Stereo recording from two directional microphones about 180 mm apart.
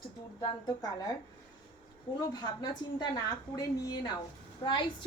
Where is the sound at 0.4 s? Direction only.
20° left (ahead or behind).